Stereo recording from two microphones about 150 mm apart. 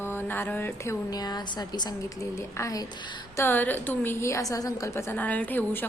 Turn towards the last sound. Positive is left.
turn(degrees=10)  # may be behind; listen again after turning